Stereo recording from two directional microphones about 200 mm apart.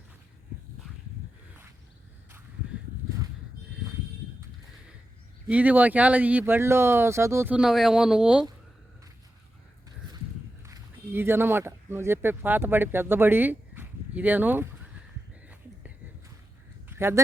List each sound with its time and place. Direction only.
5.5 s speech: 10° right (ahead or behind)
10.7 s speech: 15° right (ahead or behind)
16.9 s speech: 10° right (ahead or behind)